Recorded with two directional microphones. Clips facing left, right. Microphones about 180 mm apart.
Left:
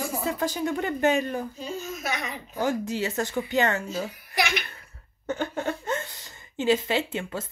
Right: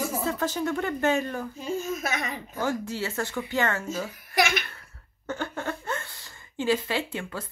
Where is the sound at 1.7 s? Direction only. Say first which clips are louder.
Right 4 dB; 50° right (ahead or behind).